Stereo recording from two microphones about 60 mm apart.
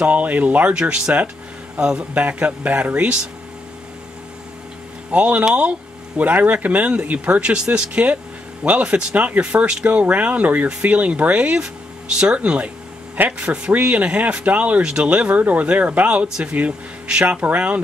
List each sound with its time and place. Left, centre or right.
0.0 s speech: right
5.1 s speech: centre
15.2 s speech: right